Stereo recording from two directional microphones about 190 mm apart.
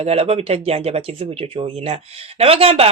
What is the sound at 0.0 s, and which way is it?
Speech, 30° right (ahead or behind).